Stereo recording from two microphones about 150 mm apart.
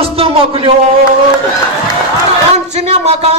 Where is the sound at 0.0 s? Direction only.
40° right (ahead or behind).